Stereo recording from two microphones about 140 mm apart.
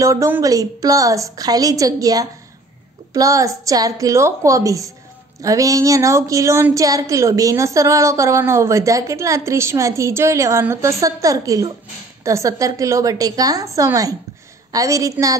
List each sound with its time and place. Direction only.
0.0 s a woman's voice: 20° right (ahead or behind)